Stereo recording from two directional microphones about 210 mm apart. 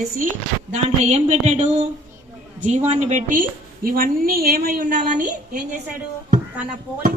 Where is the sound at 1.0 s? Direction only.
35° right (ahead or behind).